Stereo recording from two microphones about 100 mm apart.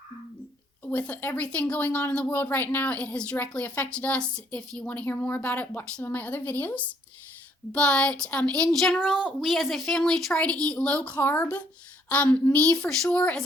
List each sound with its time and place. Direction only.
0.9 s speech: 20° left (ahead or behind)
4.9 s a woman's voice: 15° left (ahead or behind)